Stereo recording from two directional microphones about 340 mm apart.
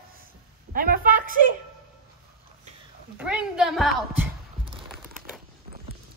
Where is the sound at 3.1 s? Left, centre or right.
Centre.